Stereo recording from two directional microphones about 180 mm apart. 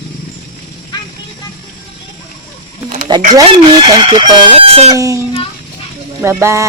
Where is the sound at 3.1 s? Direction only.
25° right (ahead or behind).